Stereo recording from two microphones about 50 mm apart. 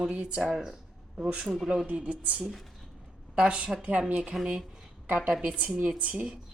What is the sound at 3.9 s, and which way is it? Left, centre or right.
A woman's voice, right.